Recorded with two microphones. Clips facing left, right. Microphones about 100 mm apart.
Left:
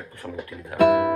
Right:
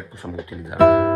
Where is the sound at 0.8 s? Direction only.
50° right (ahead or behind).